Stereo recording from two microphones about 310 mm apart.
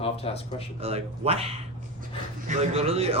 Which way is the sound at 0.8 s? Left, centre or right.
Centre.